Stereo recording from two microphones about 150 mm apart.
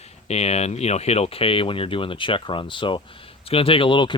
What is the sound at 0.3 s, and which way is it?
Speech, 45° left (ahead or behind).